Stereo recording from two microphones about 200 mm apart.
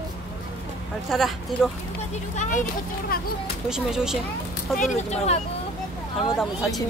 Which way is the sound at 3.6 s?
5° right (ahead or behind).